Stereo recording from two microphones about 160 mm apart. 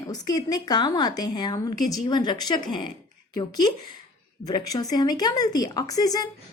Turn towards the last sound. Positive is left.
turn(degrees=25)  # may be behind; listen again after turning